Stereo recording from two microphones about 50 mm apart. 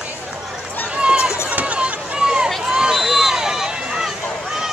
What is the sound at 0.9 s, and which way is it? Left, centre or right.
Run, centre.